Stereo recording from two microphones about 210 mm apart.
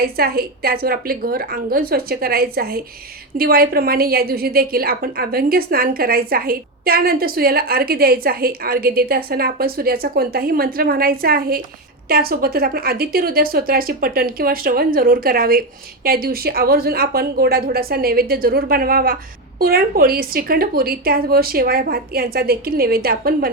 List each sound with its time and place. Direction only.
0.0 s a woman's voice: 45° right (ahead or behind)